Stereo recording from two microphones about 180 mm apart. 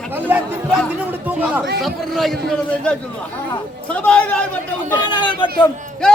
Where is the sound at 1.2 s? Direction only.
10° right (ahead or behind).